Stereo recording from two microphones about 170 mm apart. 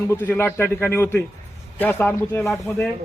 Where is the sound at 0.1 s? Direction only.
15° left (ahead or behind).